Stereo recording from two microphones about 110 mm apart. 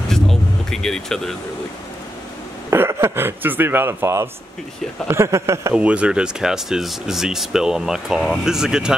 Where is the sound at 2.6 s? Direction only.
25° right (ahead or behind).